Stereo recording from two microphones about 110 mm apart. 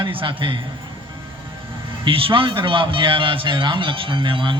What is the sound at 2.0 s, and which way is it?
A man's voice, 55° right (ahead or behind).